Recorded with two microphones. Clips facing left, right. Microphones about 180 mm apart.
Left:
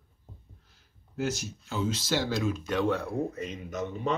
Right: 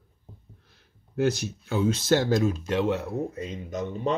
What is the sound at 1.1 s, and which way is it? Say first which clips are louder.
Speech: right 7 dB; 65° right (ahead or behind).